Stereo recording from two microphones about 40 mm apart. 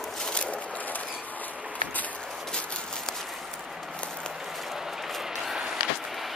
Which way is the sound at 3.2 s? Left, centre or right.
Centre.